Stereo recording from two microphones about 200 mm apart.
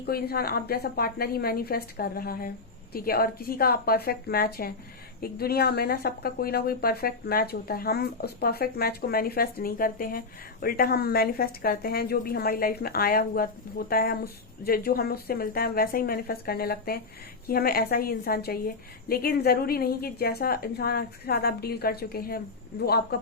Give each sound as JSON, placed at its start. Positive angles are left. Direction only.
{"t": 0.0, "sound": "speech", "side_deg": 50}